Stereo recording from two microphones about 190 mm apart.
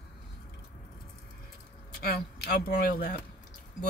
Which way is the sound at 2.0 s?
55° left (ahead or behind).